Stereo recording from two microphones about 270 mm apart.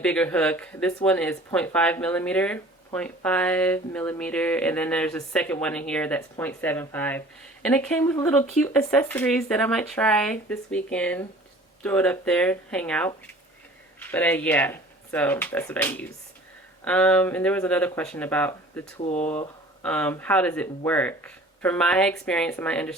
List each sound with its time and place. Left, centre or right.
0.0 s speech: centre
18.9 s speech: left
19.2 s speech: centre